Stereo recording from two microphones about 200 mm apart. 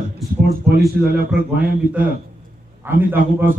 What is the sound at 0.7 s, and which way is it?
Speech, 50° right (ahead or behind).